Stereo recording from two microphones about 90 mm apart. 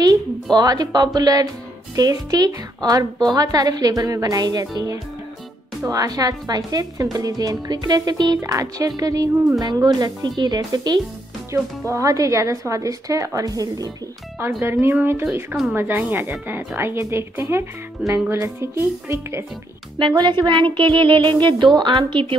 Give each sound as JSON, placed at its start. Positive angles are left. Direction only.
{"t": 0.0, "sound": "a woman's voice", "side_deg": -45}
{"t": 11.5, "sound": "a woman's voice", "side_deg": -35}
{"t": 14.6, "sound": "speech", "side_deg": -25}
{"t": 20.0, "sound": "music", "side_deg": -60}